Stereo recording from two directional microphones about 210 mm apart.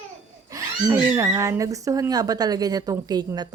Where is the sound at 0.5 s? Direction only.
15° right (ahead or behind).